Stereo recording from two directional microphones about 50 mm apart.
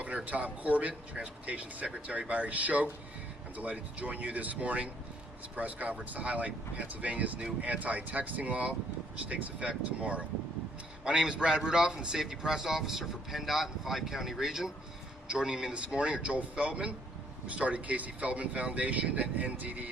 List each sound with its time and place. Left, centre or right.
0.0 s a man's voice: right